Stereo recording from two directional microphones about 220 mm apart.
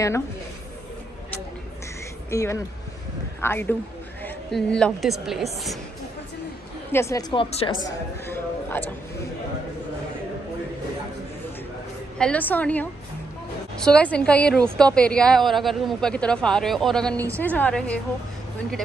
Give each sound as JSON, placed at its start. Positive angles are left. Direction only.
{"t": 2.3, "sound": "a man's voice", "side_deg": 15}
{"t": 6.9, "sound": "speech", "side_deg": 10}
{"t": 8.3, "sound": "a sound", "side_deg": 10}
{"t": 12.2, "sound": "a woman's voice", "side_deg": 5}